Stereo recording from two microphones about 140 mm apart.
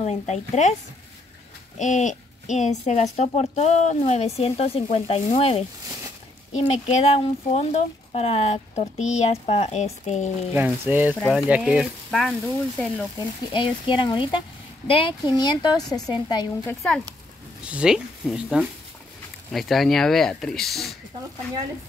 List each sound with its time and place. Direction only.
0.0 s a woman's voice: 55° left (ahead or behind)
1.8 s a woman's voice: 60° left (ahead or behind)
10.5 s speech: 15° right (ahead or behind)
13.5 s speech: 35° left (ahead or behind)
17.6 s speech: 5° right (ahead or behind)